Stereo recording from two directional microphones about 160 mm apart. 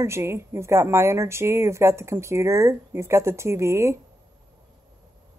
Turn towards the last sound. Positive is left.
turn(degrees=-15)  # may be behind; listen again after turning